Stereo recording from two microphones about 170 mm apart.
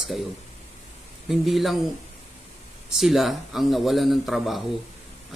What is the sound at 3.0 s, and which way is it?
A man's voice, centre (ahead or behind).